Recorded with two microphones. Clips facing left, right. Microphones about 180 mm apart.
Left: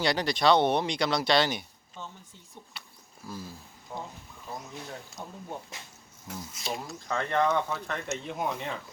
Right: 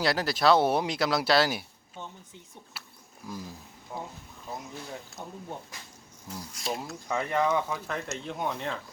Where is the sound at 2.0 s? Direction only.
15° right (ahead or behind).